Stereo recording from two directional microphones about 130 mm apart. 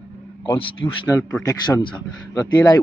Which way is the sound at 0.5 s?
40° left (ahead or behind).